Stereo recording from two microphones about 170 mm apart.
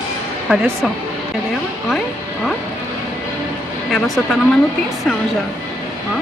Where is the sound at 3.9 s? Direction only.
Centre (ahead or behind).